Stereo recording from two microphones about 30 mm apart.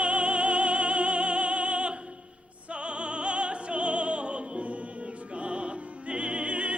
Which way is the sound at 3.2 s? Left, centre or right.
Right.